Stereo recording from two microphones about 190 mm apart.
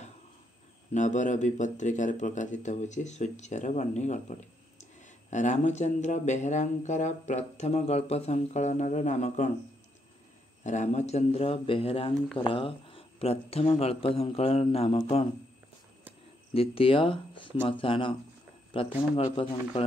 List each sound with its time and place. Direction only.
0.9 s speech: 40° left (ahead or behind)
10.6 s speech: 40° left (ahead or behind)
16.5 s speech: 30° left (ahead or behind)